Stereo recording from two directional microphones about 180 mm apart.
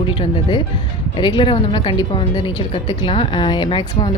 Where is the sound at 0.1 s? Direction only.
30° left (ahead or behind).